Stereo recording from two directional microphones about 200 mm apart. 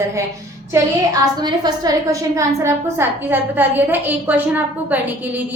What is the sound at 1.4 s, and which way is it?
A woman's voice, 20° right (ahead or behind).